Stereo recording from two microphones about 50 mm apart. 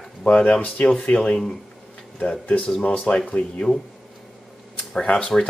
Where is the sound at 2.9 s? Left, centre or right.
Centre.